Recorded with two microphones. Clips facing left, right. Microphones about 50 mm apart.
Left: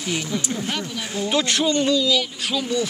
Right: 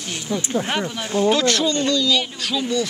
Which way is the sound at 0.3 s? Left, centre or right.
Right.